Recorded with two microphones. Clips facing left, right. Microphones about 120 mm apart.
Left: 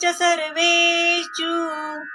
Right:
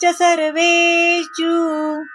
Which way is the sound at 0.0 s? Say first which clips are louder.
Right 6 dB; 40° right (ahead or behind).